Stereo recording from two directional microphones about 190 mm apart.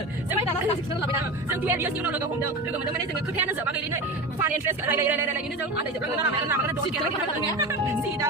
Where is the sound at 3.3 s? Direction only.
10° right (ahead or behind).